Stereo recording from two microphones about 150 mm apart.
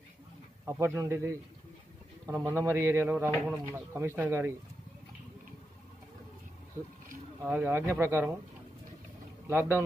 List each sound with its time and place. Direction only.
0.7 s speech: 20° right (ahead or behind)
7.4 s speech: 10° right (ahead or behind)
9.5 s speech: 15° right (ahead or behind)